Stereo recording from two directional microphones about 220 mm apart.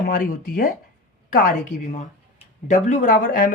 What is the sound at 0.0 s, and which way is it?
Speech, 40° left (ahead or behind).